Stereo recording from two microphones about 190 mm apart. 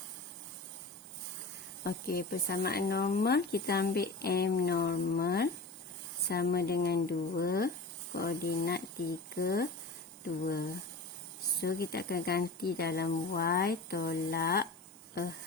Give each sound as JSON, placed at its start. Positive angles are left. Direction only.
{"t": 1.8, "sound": "speech", "side_deg": 50}